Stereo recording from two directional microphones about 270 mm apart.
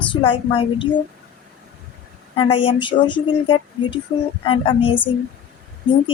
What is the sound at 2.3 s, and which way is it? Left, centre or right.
Speech, centre.